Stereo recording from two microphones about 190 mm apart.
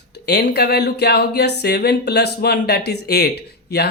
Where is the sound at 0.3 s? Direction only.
60° left (ahead or behind).